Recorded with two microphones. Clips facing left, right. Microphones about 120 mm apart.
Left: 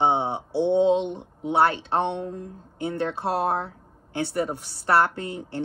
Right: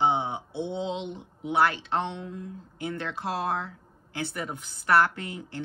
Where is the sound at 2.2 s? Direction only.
40° left (ahead or behind).